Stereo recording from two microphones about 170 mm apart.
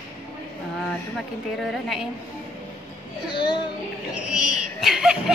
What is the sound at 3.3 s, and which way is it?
Speech, 30° left (ahead or behind).